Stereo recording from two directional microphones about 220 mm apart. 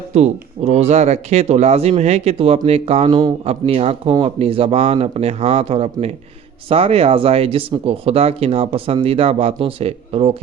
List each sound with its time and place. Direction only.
0.1 s speech: 30° right (ahead or behind)